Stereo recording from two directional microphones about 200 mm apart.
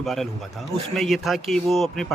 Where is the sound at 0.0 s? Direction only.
Centre (ahead or behind).